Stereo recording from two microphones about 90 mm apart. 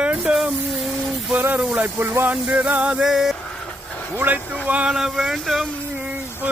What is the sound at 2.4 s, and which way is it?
Music, 10° right (ahead or behind).